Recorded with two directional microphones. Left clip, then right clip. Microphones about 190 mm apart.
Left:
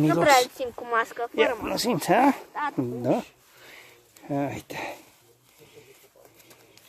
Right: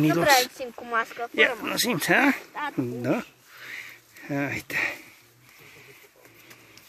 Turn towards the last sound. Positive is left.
turn(degrees=5)  # may be behind; listen again after turning